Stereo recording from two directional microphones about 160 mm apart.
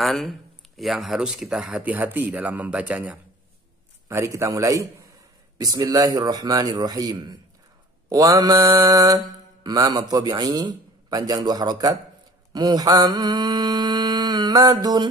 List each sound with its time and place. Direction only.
0.0 s speech: centre (ahead or behind)
4.1 s mantra: 20° right (ahead or behind)